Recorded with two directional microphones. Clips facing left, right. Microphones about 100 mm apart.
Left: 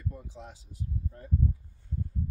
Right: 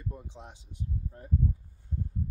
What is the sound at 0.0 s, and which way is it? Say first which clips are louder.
Speech: left 1 dB; 20° right (ahead or behind).